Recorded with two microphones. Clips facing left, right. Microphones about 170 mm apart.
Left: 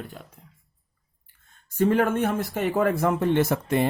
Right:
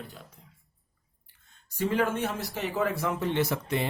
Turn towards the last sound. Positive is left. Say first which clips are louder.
# left 6 dB
turn(degrees=50)  # may be behind; listen again after turning